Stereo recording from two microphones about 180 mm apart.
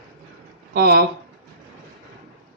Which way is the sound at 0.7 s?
60° right (ahead or behind).